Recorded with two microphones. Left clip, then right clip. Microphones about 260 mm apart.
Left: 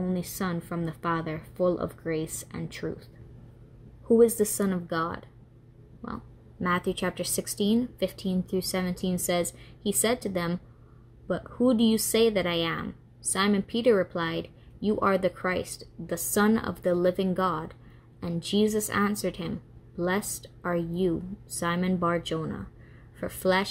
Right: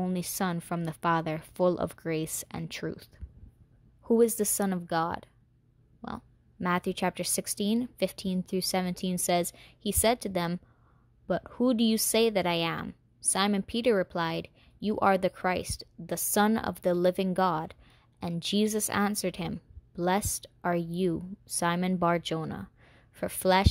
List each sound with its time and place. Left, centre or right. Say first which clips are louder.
0.0 s speech: even; right
4.2 s speech: left 4 dB; right